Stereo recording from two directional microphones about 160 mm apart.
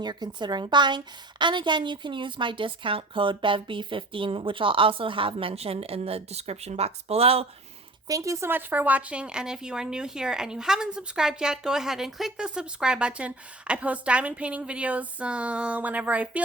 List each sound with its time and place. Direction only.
0.0 s a woman's voice: 25° right (ahead or behind)
8.0 s a woman's voice: 20° right (ahead or behind)